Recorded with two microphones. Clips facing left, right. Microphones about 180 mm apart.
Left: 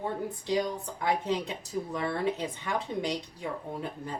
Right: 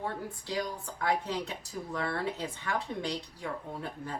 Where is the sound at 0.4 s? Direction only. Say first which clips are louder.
Left 6 dB; 20° left (ahead or behind).